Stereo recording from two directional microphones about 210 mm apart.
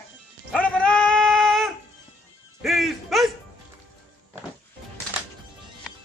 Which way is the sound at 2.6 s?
Centre (ahead or behind).